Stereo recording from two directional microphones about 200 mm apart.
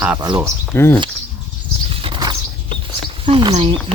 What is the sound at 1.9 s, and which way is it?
Patter, 25° right (ahead or behind).